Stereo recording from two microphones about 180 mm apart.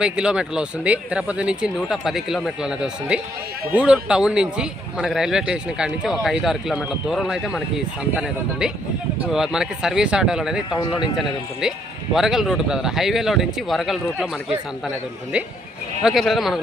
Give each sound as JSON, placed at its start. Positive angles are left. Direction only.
{"t": 0.0, "sound": "speech", "side_deg": -5}
{"t": 10.8, "sound": "speech", "side_deg": 25}
{"t": 11.0, "sound": "speech", "side_deg": -5}
{"t": 16.0, "sound": "speech", "side_deg": 0}